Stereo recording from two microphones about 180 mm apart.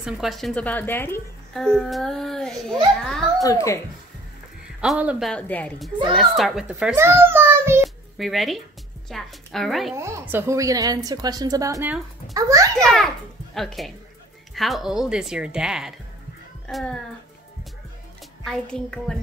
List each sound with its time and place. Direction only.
0.0 s speech: centre (ahead or behind)
3.4 s speech: 15° left (ahead or behind)
4.7 s speech: 5° right (ahead or behind)
5.3 s a child's voice: 5° left (ahead or behind); by 7.8 s 15° right (ahead or behind)
7.8 s a sound: centre (ahead or behind)
9.1 s speech: centre (ahead or behind)
9.9 s a woman's voice: 15° right (ahead or behind)
13.6 s speech: centre (ahead or behind)
18.4 s speech: 5° left (ahead or behind)